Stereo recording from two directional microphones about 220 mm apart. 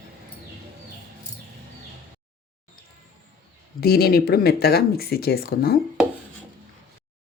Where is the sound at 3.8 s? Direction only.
45° left (ahead or behind).